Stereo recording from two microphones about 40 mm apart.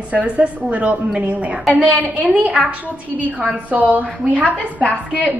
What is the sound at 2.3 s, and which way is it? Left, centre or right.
Speech, right.